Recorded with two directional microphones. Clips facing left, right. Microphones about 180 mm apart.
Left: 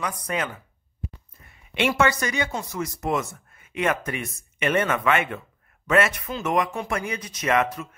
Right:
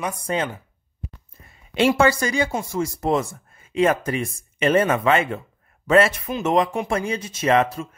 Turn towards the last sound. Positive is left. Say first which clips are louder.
# right 4 dB
turn(degrees=-30)  # may be behind; listen again after turning